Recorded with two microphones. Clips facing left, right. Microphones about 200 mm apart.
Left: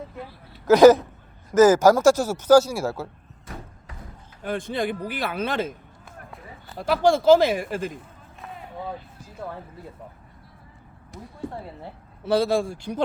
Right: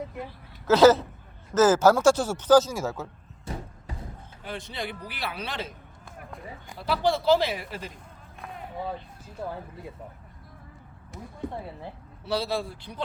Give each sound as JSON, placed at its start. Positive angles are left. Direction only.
{"t": 0.3, "sound": "speech", "side_deg": 15}
{"t": 4.4, "sound": "speech", "side_deg": 50}
{"t": 6.7, "sound": "speech", "side_deg": 50}
{"t": 11.1, "sound": "speech", "side_deg": 0}
{"t": 12.2, "sound": "speech", "side_deg": 50}